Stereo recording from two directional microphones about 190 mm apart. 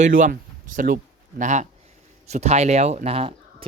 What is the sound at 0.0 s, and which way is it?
Speech, 45° right (ahead or behind).